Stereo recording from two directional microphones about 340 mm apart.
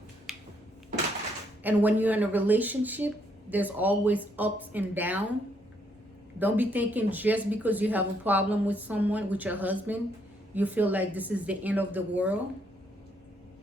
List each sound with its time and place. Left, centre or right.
0.3 s a sound: centre
1.6 s speech: centre
6.4 s speech: centre